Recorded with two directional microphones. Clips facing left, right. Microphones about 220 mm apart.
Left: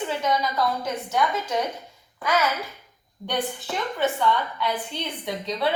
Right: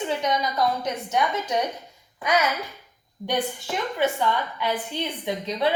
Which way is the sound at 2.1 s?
15° right (ahead or behind).